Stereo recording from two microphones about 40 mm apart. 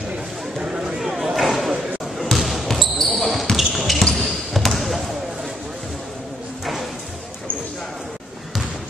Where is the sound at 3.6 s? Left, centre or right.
Centre.